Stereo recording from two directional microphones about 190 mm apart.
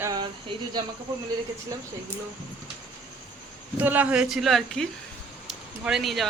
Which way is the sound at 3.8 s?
10° right (ahead or behind).